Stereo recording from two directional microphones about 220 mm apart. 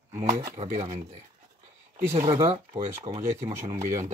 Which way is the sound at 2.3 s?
25° right (ahead or behind).